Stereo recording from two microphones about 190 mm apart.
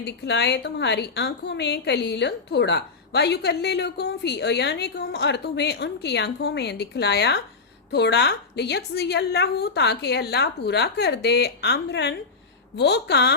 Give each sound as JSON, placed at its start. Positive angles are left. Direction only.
{"t": 0.0, "sound": "a woman's voice", "side_deg": 60}